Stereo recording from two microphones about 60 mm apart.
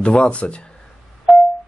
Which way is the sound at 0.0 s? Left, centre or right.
Centre.